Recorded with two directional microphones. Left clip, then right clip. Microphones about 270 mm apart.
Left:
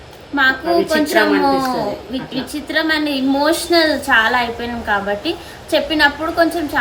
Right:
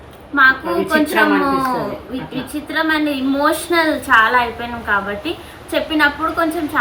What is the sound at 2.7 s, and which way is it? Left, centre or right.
A woman's voice, left.